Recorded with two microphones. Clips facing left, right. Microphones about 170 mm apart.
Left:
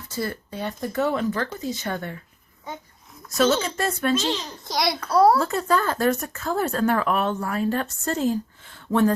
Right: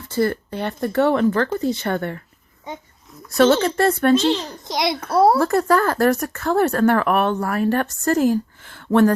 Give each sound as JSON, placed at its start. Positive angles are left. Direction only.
{"t": 0.1, "sound": "speech", "side_deg": -60}
{"t": 3.2, "sound": "speech", "side_deg": -65}
{"t": 4.7, "sound": "a child's voice", "side_deg": -20}
{"t": 5.4, "sound": "speech", "side_deg": -70}